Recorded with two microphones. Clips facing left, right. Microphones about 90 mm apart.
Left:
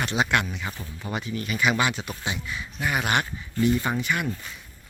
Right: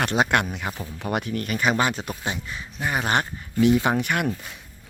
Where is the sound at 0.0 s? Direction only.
50° right (ahead or behind).